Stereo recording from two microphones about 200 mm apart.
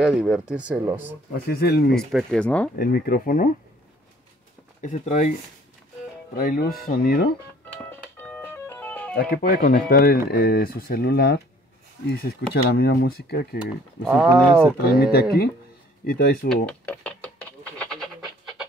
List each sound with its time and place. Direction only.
0.0 s speech: 5° right (ahead or behind)
1.3 s speech: 50° left (ahead or behind)
2.0 s speech: 5° left (ahead or behind)
2.7 s speech: 50° left (ahead or behind)
4.8 s speech: 40° left (ahead or behind)
6.3 s speech: 45° left (ahead or behind)
7.9 s music: 10° left (ahead or behind)
9.1 s speech: 50° left (ahead or behind)
14.0 s speech: 10° right (ahead or behind)
15.0 s speech: 50° left (ahead or behind)
16.4 s knock: 5° left (ahead or behind)